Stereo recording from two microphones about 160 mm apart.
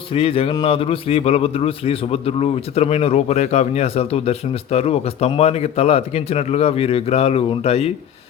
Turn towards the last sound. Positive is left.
turn(degrees=40)  # may be behind; listen again after turning